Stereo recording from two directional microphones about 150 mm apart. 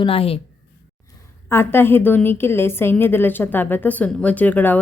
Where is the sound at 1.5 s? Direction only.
15° left (ahead or behind).